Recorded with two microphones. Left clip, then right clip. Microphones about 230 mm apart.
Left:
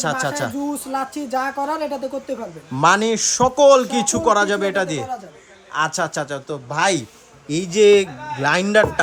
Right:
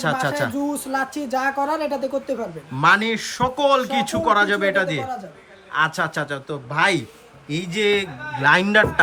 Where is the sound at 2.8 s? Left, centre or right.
Centre.